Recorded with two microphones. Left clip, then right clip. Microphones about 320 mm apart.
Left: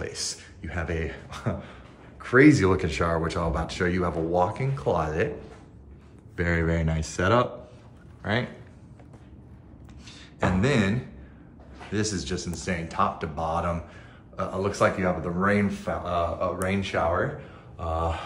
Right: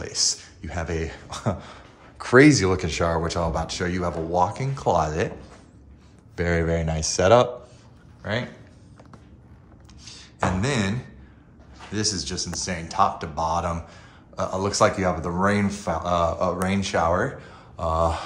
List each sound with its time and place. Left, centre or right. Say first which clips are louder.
0.0 s speech: right 8 dB; centre
6.3 s a man's voice: right 3 dB; centre
10.0 s a sound: right 2 dB; centre
11.9 s speech: right 2 dB; centre